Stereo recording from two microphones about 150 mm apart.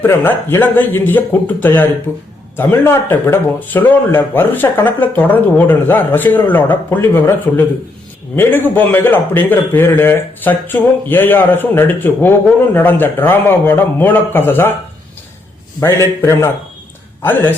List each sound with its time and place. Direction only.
0.0 s speech: 15° left (ahead or behind)
15.8 s speech: 15° left (ahead or behind)